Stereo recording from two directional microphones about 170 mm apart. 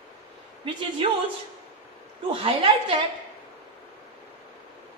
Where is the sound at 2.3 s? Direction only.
30° right (ahead or behind).